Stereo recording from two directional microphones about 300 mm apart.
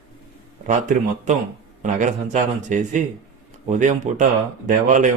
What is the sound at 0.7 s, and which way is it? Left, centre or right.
A man's voice, right.